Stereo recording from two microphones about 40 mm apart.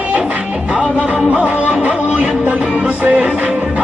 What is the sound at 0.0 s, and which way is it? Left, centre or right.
Music, right.